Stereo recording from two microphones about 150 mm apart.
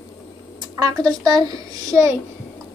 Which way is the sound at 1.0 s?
25° right (ahead or behind).